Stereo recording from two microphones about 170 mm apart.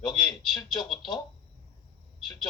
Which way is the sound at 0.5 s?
Centre (ahead or behind).